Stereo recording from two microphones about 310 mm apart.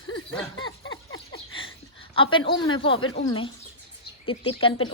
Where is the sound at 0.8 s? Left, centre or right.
Left.